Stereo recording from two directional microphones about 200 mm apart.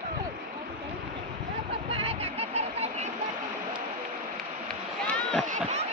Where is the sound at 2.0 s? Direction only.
30° right (ahead or behind).